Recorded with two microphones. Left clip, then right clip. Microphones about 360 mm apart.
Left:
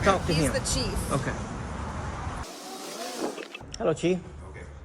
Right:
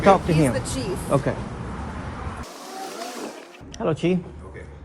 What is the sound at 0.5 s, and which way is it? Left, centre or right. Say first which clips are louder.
Speech: right 1 dB; centre.